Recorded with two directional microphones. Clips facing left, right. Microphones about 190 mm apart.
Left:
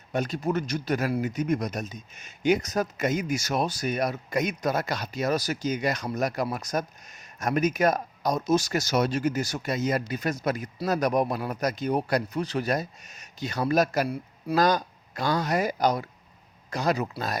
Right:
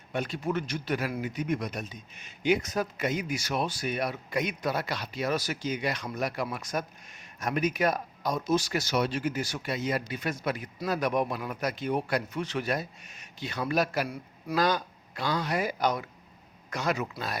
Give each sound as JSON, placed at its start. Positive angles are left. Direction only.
{"t": 0.1, "sound": "speech", "side_deg": 40}